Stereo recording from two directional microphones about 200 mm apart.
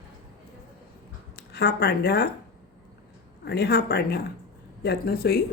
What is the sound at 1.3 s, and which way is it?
Speech, 55° left (ahead or behind).